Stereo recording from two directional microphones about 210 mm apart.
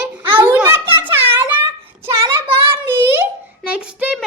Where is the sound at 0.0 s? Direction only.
10° right (ahead or behind).